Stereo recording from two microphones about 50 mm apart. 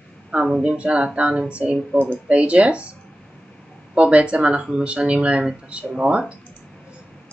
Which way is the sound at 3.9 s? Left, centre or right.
Right.